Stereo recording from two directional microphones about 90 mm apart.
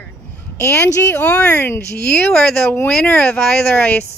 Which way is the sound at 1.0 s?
25° left (ahead or behind).